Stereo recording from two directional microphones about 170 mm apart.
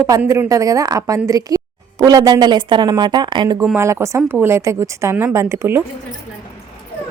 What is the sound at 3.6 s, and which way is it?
Speech, 15° right (ahead or behind).